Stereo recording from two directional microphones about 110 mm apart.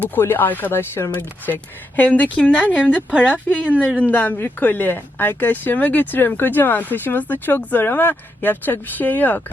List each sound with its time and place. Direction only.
0.0 s speech: 20° left (ahead or behind)
3.1 s a woman's voice: 10° right (ahead or behind)
3.9 s speech: 15° left (ahead or behind)